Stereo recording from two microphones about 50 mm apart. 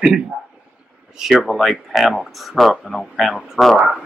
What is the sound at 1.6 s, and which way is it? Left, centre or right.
Speech, centre.